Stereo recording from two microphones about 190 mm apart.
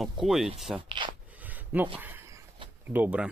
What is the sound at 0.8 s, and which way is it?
Speech, 25° right (ahead or behind).